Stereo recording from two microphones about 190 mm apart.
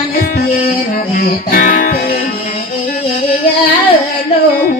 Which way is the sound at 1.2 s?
45° left (ahead or behind).